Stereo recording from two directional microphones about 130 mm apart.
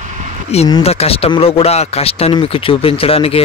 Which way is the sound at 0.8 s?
50° left (ahead or behind).